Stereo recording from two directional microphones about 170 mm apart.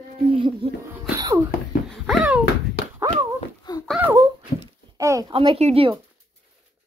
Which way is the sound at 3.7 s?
25° left (ahead or behind).